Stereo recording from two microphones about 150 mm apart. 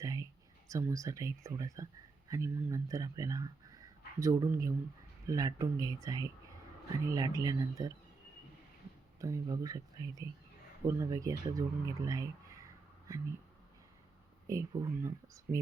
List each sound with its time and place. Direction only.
0.0 s a sound: 20° right (ahead or behind)
0.7 s speech: 20° right (ahead or behind)
9.2 s speech: 20° right (ahead or behind)
14.4 s speech: 20° right (ahead or behind)